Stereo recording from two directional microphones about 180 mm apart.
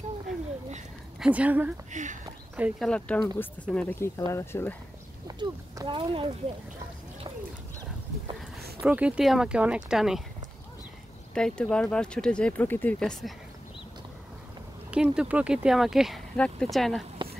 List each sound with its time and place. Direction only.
1.2 s a woman's voice: 5° right (ahead or behind)
1.9 s speech: 40° right (ahead or behind)
2.5 s a woman's voice: 10° right (ahead or behind)
2.9 s speech: 5° left (ahead or behind)
5.4 s speech: 25° right (ahead or behind)
8.8 s speech: 5° right (ahead or behind)
11.3 s speech: 5° left (ahead or behind)
14.9 s speech: 5° right (ahead or behind)